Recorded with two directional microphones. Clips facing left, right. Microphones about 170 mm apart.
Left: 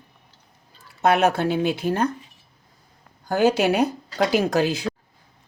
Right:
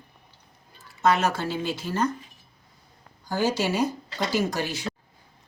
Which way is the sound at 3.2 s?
60° left (ahead or behind).